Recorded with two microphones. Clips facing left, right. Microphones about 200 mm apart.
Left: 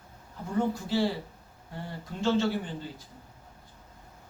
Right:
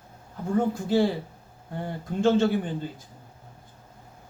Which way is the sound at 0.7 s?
50° right (ahead or behind).